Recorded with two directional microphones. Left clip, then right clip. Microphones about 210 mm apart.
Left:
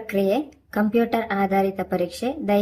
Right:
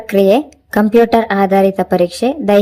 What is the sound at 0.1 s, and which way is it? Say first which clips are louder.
A woman's voice: right 11 dB; 35° right (ahead or behind).